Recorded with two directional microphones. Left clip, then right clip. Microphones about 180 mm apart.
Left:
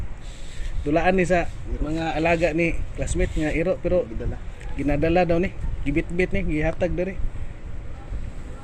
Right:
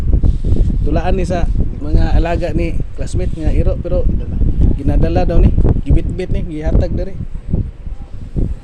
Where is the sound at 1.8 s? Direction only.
45° right (ahead or behind).